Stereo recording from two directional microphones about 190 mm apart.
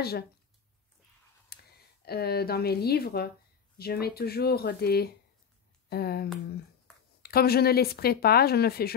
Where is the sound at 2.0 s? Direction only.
55° left (ahead or behind).